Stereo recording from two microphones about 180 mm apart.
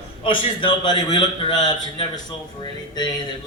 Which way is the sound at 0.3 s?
30° left (ahead or behind).